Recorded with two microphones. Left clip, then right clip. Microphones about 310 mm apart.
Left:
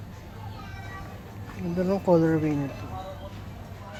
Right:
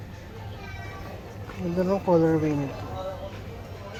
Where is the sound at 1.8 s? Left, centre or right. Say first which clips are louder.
Even; centre.